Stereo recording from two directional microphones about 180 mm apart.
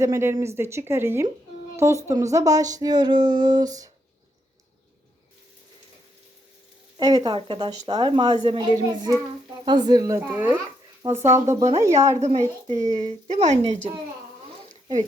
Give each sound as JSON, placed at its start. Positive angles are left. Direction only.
{"t": 0.0, "sound": "speech", "side_deg": -15}
{"t": 7.0, "sound": "speech", "side_deg": -20}
{"t": 12.1, "sound": "a woman's voice", "side_deg": -35}
{"t": 14.6, "sound": "a sound", "side_deg": -35}